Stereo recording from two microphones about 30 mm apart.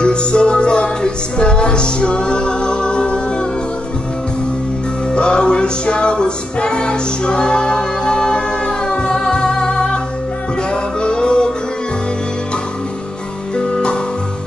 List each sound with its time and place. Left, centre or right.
0.0 s music: left
5.1 s music: left